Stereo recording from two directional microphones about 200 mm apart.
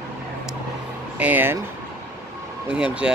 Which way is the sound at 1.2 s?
10° right (ahead or behind).